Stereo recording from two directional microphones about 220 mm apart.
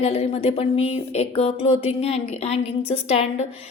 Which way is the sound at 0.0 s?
25° left (ahead or behind).